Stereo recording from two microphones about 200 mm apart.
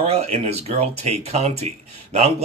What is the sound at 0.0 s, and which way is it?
Speech, 30° right (ahead or behind).